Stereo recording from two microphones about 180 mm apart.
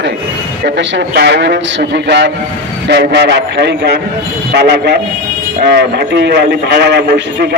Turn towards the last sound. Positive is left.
turn(degrees=-65)  # may be behind; listen again after turning